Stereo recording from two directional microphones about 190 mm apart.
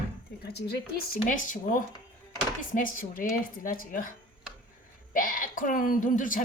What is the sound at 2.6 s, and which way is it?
Speech, 45° left (ahead or behind).